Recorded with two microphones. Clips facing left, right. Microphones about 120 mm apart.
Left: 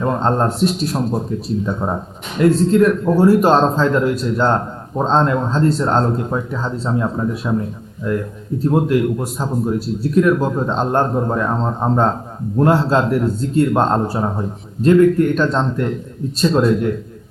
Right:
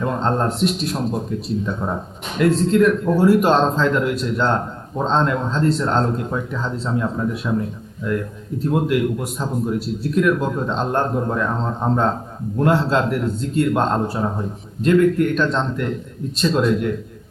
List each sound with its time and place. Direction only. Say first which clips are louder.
0.0 s speech: left 3 dB; 30° left (ahead or behind)
15.4 s speech: left 3 dB; 35° left (ahead or behind)